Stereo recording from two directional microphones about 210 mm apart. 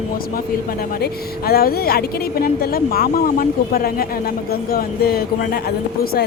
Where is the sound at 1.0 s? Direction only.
45° left (ahead or behind).